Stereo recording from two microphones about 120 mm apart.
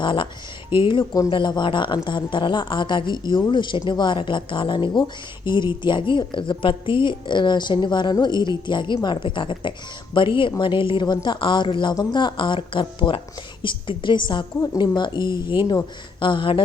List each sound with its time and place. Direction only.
0.0 s speech: 40° left (ahead or behind)